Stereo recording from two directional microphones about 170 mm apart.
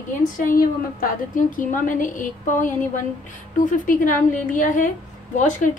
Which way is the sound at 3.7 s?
50° left (ahead or behind).